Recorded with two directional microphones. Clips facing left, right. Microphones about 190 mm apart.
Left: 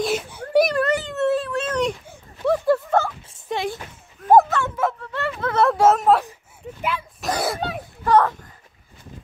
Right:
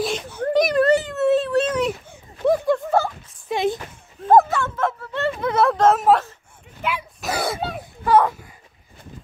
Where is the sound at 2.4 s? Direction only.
20° right (ahead or behind).